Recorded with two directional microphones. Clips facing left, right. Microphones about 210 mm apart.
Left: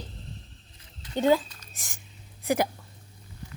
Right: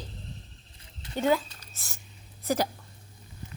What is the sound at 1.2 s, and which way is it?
Speech, 15° left (ahead or behind).